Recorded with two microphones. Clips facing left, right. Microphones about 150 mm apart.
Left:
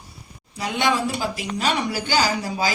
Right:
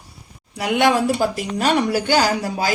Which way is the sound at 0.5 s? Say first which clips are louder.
Right 5 dB; 65° right (ahead or behind).